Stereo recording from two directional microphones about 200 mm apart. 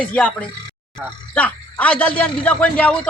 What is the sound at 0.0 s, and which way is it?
A man's voice, 5° left (ahead or behind).